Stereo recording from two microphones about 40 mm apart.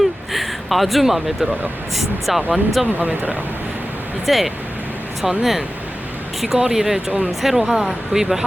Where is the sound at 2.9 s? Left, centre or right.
Right.